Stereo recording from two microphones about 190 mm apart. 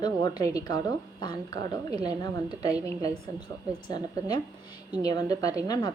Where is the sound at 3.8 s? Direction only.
20° left (ahead or behind).